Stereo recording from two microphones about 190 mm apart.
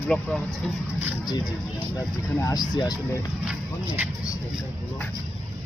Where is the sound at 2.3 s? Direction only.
20° left (ahead or behind).